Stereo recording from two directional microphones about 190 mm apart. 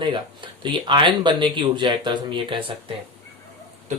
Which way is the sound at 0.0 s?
25° right (ahead or behind).